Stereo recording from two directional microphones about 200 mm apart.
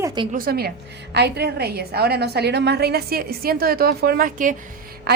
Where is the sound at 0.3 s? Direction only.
50° right (ahead or behind).